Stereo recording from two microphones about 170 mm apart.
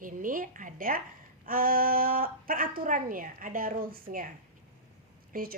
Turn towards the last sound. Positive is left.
turn(degrees=-55)  # may be behind; listen again after turning